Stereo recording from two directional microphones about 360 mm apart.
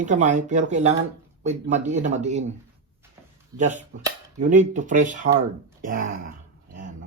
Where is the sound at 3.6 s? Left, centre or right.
Centre.